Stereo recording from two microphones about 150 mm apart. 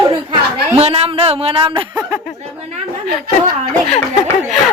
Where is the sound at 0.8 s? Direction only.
45° right (ahead or behind).